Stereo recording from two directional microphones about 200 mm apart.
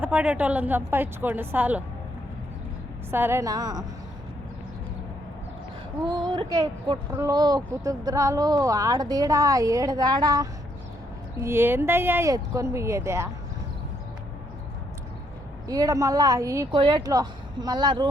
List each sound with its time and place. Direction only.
0.0 s speech: 5° right (ahead or behind)
3.1 s speech: 10° right (ahead or behind)
6.1 s speech: 20° right (ahead or behind)
15.6 s speech: 20° right (ahead or behind)